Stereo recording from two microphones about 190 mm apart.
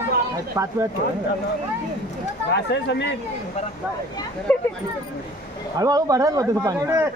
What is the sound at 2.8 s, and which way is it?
Speech, 65° left (ahead or behind).